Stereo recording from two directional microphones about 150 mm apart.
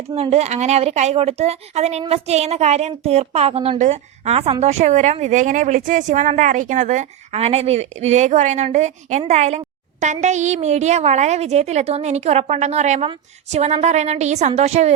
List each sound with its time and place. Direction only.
0.1 s a woman's voice: 45° right (ahead or behind)